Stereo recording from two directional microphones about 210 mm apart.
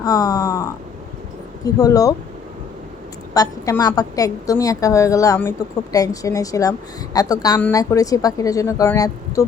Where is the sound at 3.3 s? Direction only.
15° left (ahead or behind).